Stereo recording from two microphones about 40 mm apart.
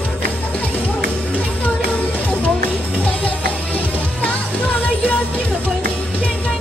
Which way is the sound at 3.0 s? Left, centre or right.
Left.